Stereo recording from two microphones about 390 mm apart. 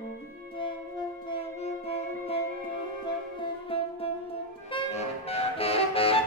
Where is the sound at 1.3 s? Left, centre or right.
Centre.